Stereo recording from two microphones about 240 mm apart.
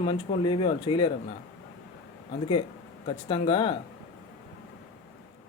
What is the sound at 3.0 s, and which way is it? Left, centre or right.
Speech, centre.